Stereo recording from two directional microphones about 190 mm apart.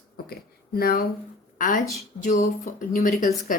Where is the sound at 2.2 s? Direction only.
40° left (ahead or behind).